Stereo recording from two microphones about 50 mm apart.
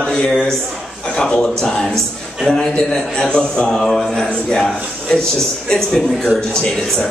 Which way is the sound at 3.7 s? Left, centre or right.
Centre.